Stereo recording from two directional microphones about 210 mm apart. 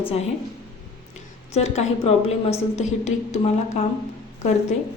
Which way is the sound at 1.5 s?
30° left (ahead or behind).